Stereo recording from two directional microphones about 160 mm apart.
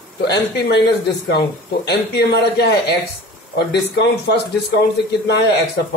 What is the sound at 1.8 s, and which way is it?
Speech, 90° left.